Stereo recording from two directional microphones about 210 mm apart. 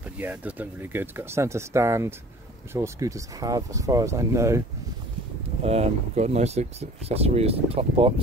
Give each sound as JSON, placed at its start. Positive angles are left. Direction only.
{"t": 0.2, "sound": "speech", "side_deg": -10}
{"t": 5.6, "sound": "speech", "side_deg": -30}